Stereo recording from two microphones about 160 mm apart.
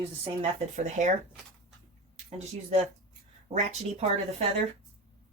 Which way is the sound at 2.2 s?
45° right (ahead or behind).